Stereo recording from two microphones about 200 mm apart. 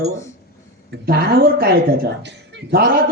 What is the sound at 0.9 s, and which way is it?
A man's voice, 50° right (ahead or behind).